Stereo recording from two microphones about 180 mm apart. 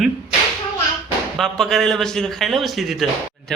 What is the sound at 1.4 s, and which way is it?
A man's voice, centre (ahead or behind).